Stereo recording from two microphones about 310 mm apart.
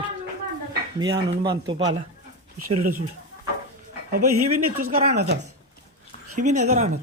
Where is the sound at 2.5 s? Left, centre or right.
Right.